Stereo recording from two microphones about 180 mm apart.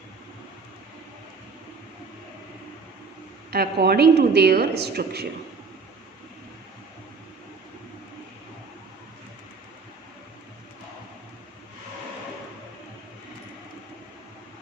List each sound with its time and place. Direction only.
3.5 s a woman's voice: 60° right (ahead or behind)